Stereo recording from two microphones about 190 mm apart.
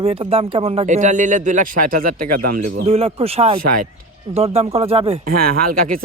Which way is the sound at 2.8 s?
30° right (ahead or behind).